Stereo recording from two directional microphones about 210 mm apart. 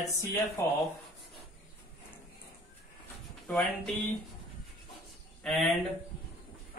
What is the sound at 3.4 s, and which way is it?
Speech, 5° left (ahead or behind).